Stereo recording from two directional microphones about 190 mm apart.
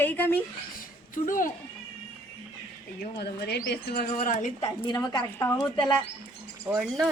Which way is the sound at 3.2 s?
60° left (ahead or behind).